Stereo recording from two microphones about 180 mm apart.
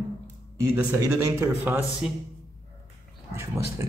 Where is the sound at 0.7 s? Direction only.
15° right (ahead or behind).